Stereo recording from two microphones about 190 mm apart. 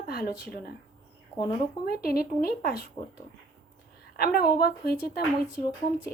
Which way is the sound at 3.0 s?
30° left (ahead or behind).